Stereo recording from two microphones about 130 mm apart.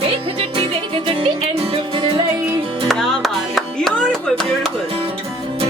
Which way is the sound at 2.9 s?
Centre (ahead or behind).